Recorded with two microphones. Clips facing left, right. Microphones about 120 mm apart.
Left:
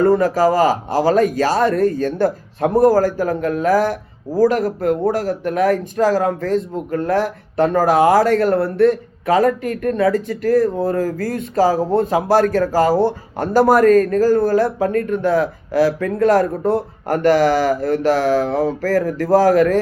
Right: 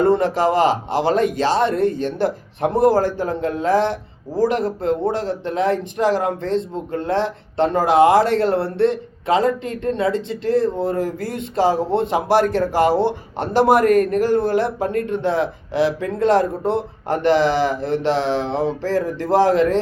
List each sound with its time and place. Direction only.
0.0 s speech: 25° right (ahead or behind)